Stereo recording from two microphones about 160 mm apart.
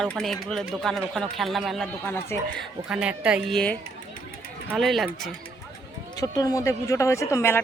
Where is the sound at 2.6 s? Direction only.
5° right (ahead or behind).